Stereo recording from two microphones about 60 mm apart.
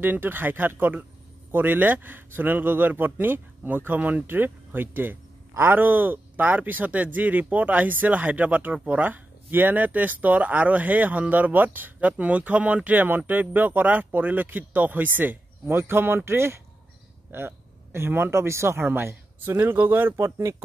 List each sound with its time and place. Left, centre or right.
0.0 s a man's voice: right
15.7 s speech: right
20.2 s speech: right